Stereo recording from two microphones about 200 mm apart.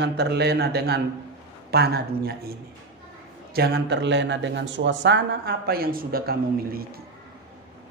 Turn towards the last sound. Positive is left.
turn(degrees=-50)  # may be behind; listen again after turning